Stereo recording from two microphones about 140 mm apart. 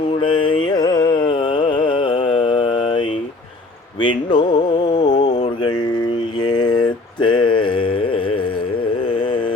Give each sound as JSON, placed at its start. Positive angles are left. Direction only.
{"t": 0.2, "sound": "carnatic music", "side_deg": 40}
{"t": 4.0, "sound": "music", "side_deg": 35}
{"t": 6.4, "sound": "mantra", "side_deg": 30}